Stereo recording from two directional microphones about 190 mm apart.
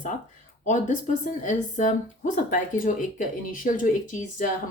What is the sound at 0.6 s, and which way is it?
Speech, 40° left (ahead or behind).